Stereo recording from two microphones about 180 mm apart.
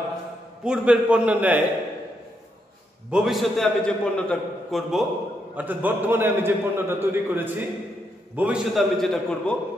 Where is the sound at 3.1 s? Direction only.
5° right (ahead or behind).